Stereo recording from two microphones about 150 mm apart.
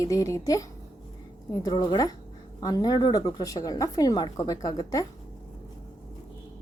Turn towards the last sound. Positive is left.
turn(degrees=25)  # may be behind; listen again after turning